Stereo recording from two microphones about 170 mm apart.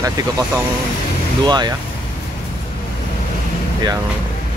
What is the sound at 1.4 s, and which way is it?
Speech, 25° right (ahead or behind).